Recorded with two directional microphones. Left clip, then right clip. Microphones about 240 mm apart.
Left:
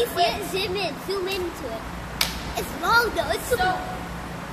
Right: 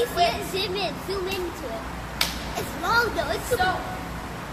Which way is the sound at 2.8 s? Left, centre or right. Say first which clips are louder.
Left 2 dB; centre.